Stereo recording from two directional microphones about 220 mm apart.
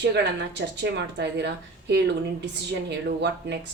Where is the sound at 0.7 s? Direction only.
50° right (ahead or behind).